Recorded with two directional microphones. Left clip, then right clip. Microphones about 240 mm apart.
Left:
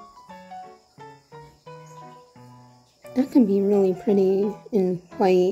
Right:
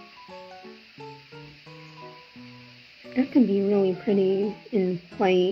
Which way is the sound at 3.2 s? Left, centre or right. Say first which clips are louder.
Left 2 dB; left.